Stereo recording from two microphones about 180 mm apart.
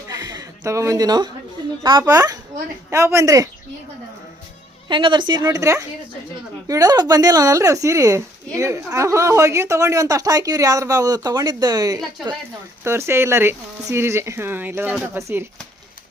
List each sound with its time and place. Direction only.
0.1 s a sound: 20° right (ahead or behind)
1.8 s a woman's voice: 25° right (ahead or behind)
4.9 s a woman's voice: 25° right (ahead or behind)